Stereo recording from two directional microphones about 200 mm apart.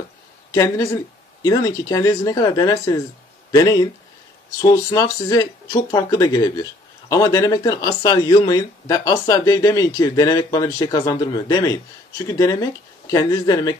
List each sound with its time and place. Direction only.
0.5 s speech: 15° left (ahead or behind)